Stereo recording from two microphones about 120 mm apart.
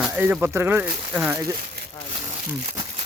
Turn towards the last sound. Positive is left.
turn(degrees=-65)  # may be behind; listen again after turning